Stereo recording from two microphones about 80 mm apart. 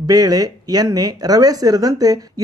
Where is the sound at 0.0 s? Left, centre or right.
Right.